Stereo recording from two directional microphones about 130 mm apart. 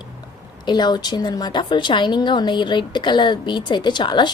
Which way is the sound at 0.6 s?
35° left (ahead or behind).